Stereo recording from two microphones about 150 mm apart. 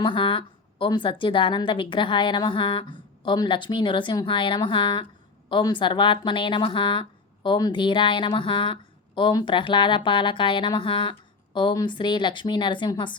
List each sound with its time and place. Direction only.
0.0 s a woman's voice: 35° left (ahead or behind)